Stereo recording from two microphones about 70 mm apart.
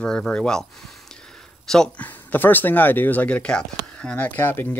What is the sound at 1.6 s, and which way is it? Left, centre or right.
Speech, centre.